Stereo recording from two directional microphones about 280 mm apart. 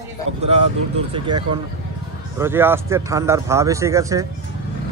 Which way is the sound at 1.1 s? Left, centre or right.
Centre.